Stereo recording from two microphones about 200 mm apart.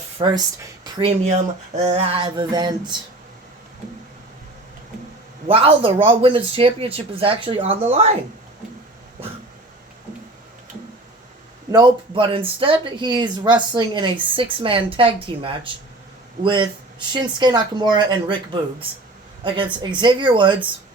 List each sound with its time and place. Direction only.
0.2 s speech: 25° right (ahead or behind)
5.5 s speech: 30° right (ahead or behind)
11.7 s speech: 20° right (ahead or behind)